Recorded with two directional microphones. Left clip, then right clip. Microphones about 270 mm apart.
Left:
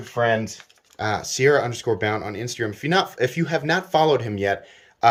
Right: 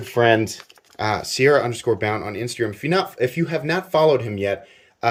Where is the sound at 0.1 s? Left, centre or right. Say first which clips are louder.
Right 4 dB; right.